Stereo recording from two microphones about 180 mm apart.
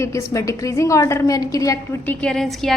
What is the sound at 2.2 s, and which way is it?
Speech, 5° left (ahead or behind).